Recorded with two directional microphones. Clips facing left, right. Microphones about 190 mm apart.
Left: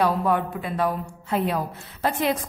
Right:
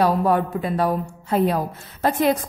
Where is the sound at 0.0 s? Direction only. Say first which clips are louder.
Right 3 dB; 40° right (ahead or behind).